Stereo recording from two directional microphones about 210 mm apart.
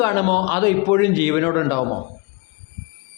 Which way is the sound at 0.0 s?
15° left (ahead or behind).